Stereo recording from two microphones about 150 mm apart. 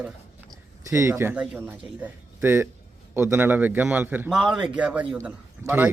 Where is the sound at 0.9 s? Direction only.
20° right (ahead or behind).